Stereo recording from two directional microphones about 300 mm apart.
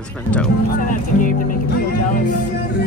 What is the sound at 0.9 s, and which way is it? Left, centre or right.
Speech, left.